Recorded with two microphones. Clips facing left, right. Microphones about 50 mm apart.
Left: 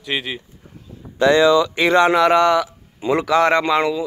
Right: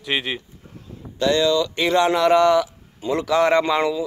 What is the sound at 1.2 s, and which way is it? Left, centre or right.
Speech, left.